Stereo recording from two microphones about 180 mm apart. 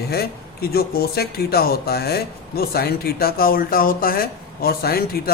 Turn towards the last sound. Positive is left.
turn(degrees=55)  # may be behind; listen again after turning